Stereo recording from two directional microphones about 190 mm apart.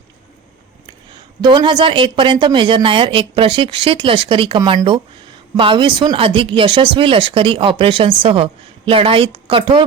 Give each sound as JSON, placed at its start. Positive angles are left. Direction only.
{"t": 1.1, "sound": "speech", "side_deg": -25}